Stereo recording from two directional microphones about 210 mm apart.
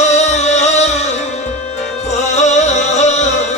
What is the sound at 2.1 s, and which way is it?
Music, 35° left (ahead or behind).